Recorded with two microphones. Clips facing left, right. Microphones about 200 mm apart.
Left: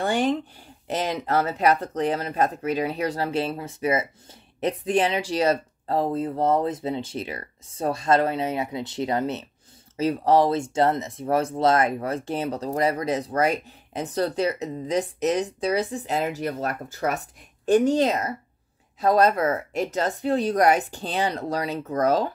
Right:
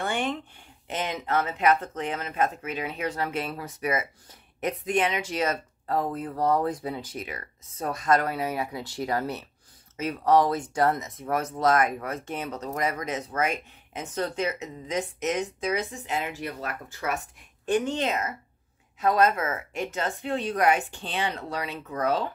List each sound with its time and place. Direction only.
0.0 s speech: 35° left (ahead or behind)